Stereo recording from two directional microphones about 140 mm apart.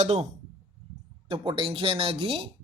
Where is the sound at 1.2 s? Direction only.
35° right (ahead or behind).